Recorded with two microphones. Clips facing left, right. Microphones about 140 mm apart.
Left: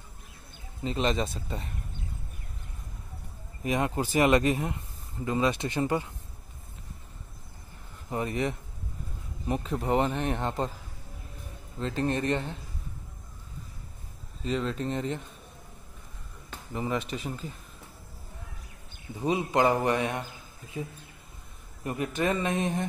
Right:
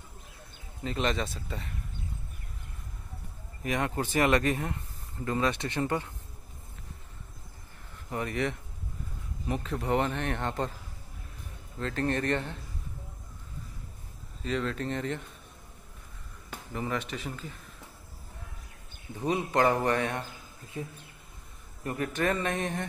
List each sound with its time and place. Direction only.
0.8 s speech: 25° left (ahead or behind)
3.6 s speech: 20° left (ahead or behind)
8.1 s speech: 25° left (ahead or behind)
9.6 s speech: 20° left (ahead or behind)
10.1 s speech: 10° left (ahead or behind)
11.8 s speech: 20° left (ahead or behind)
14.4 s speech: 25° left (ahead or behind)
16.7 s speech: 20° left (ahead or behind)
19.2 s speech: 20° left (ahead or behind)
21.8 s speech: 20° left (ahead or behind)